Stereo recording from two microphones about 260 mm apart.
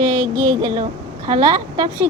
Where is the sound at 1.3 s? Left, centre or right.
Centre.